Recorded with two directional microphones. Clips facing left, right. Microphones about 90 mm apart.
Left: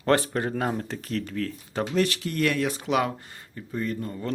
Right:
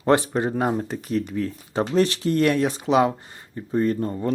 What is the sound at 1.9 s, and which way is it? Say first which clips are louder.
Speech: right 6 dB; 30° right (ahead or behind).